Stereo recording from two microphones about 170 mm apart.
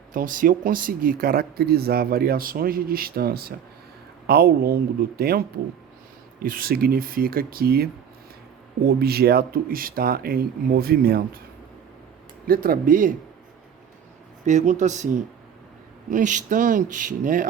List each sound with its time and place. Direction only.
0.1 s speech: 50° right (ahead or behind)
6.4 s speech: 60° right (ahead or behind)
8.9 s speech: 65° right (ahead or behind)
12.5 s speech: 60° right (ahead or behind)
14.4 s speech: 45° right (ahead or behind)